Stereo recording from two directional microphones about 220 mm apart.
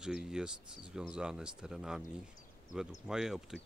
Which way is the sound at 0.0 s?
5° right (ahead or behind).